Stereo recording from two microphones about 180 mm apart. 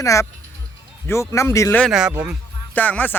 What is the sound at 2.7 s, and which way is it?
Speech, 10° left (ahead or behind).